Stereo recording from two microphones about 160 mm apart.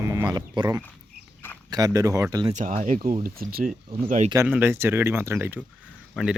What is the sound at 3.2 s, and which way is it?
Speech, 65° right (ahead or behind).